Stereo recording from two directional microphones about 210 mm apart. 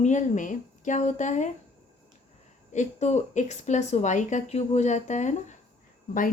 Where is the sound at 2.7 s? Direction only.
35° left (ahead or behind).